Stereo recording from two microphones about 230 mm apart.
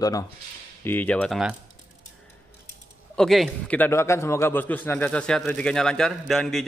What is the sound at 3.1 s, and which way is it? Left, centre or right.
A man's voice, centre.